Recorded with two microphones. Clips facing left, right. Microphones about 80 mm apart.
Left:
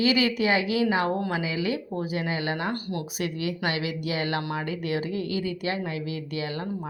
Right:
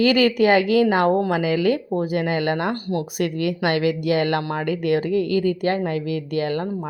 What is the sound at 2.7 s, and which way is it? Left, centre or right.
Speech, right.